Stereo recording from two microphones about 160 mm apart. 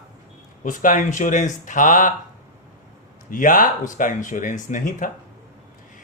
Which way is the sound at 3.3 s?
55° left (ahead or behind).